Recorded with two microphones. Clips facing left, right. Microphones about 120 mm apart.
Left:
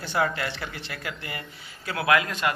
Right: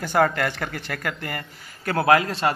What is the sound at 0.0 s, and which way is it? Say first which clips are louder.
A man's voice: right 6 dB; 50° right (ahead or behind).